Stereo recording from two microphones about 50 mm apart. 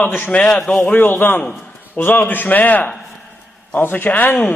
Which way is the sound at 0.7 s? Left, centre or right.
Left.